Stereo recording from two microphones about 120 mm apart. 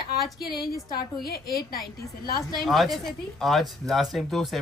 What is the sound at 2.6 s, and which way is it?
Speech, centre (ahead or behind).